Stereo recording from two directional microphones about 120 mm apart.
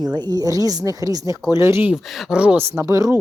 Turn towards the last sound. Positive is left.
turn(degrees=-25)  # may be behind; listen again after turning